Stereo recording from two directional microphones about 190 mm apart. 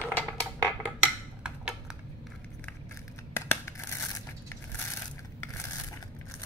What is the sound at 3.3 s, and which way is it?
Scissors, 15° left (ahead or behind).